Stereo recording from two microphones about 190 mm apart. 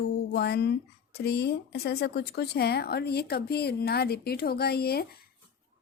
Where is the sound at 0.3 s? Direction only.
60° left (ahead or behind).